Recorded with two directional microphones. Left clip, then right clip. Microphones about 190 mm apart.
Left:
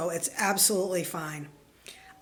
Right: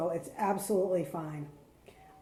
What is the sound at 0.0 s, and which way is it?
A woman's voice, 25° left (ahead or behind).